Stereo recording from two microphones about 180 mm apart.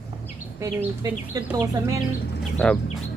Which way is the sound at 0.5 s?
15° right (ahead or behind).